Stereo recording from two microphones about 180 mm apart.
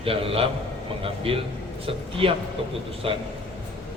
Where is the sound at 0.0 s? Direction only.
30° right (ahead or behind).